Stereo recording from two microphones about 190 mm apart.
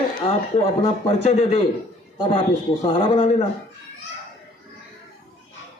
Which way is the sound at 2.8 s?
30° left (ahead or behind).